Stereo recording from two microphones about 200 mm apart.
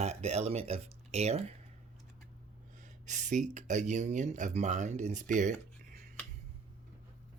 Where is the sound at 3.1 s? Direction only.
35° right (ahead or behind).